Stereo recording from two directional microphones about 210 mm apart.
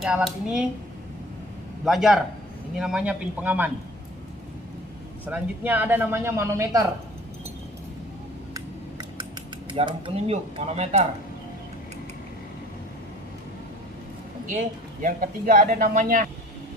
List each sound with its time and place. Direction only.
0.0 s speech: 5° right (ahead or behind)
1.9 s speech: centre (ahead or behind)
5.2 s speech: 10° right (ahead or behind)
9.2 s speech: 20° right (ahead or behind)
14.4 s speech: 35° right (ahead or behind)